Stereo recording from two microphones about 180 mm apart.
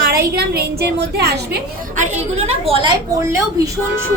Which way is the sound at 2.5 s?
30° right (ahead or behind).